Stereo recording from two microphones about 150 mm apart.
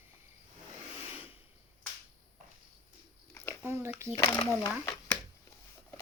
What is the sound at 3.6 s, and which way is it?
Speech, 15° right (ahead or behind).